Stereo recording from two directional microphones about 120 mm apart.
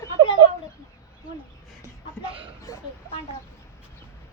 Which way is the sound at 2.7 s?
25° left (ahead or behind).